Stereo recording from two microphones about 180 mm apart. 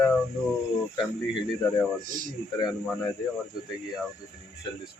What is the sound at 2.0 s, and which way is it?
Speech, 50° right (ahead or behind).